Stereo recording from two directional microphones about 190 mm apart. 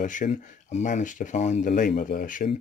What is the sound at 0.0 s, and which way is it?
Speech, 40° left (ahead or behind).